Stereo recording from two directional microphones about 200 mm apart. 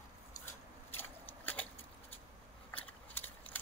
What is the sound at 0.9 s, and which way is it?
Scissors, 10° left (ahead or behind).